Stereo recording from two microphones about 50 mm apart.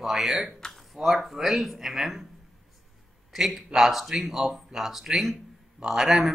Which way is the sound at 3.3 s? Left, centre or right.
Centre.